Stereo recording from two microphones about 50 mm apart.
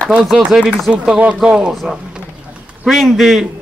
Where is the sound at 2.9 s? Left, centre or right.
Centre.